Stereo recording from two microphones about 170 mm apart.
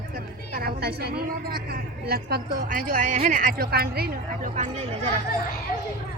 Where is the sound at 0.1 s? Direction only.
60° right (ahead or behind).